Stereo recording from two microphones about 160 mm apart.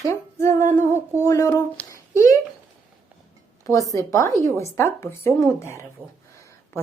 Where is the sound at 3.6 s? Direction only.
20° left (ahead or behind).